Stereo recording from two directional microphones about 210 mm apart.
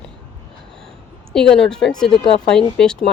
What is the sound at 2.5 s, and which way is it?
Speech, 5° left (ahead or behind).